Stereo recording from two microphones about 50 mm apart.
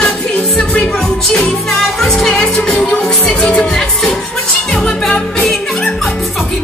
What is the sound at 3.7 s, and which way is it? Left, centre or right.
Music, centre.